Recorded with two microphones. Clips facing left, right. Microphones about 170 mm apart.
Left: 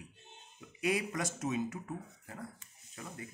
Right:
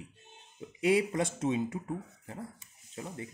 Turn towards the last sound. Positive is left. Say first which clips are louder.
# right 5 dB
turn(degrees=-25)  # may be behind; listen again after turning